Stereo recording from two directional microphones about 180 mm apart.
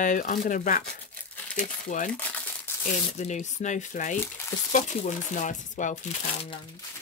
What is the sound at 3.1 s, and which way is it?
Speech, 40° left (ahead or behind).